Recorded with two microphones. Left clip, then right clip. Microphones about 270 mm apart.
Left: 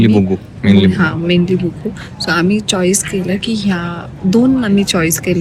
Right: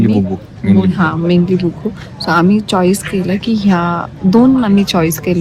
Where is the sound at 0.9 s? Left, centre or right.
Centre.